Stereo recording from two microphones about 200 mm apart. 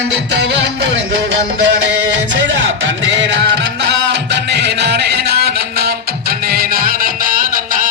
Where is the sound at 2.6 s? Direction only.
65° right (ahead or behind); by 7.9 s 45° right (ahead or behind).